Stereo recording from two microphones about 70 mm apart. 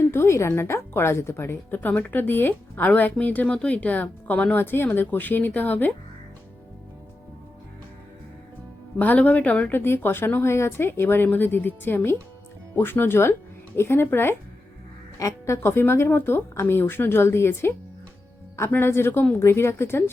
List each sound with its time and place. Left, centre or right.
0.0 s a woman's voice: left
9.0 s speech: left